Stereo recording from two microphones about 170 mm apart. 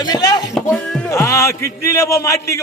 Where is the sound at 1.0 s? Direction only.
15° left (ahead or behind).